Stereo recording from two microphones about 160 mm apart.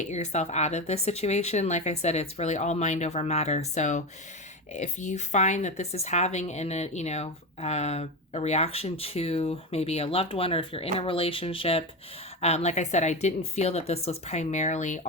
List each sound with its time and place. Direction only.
0.0 s a woman's voice: 45° left (ahead or behind)